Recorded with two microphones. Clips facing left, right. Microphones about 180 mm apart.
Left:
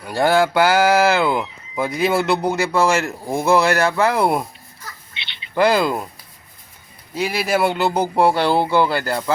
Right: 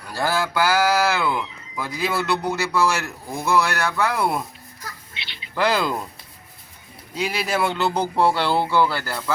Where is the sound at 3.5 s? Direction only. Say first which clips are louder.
Left 3 dB; 25° left (ahead or behind).